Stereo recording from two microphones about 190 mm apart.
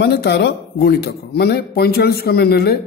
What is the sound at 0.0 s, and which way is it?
Speech, 60° left (ahead or behind).